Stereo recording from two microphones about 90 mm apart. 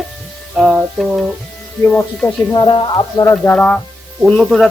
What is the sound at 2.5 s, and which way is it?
Speech, 55° left (ahead or behind).